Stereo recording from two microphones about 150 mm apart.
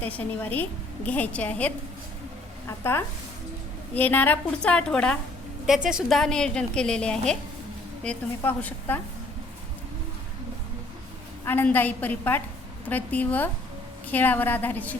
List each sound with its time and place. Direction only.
0.0 s a woman's voice: 10° left (ahead or behind)
11.4 s a woman's voice: 15° left (ahead or behind)